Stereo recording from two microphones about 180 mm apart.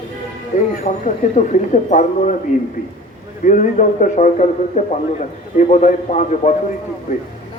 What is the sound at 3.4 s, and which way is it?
A man's voice, 45° left (ahead or behind).